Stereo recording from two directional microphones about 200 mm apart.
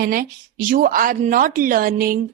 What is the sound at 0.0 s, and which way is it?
A woman's voice, 50° right (ahead or behind).